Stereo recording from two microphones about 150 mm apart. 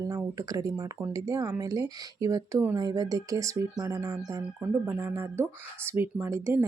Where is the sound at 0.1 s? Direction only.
25° right (ahead or behind).